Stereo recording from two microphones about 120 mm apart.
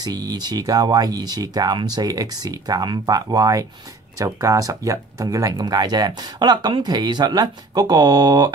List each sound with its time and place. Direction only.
0.0 s speech: 35° right (ahead or behind)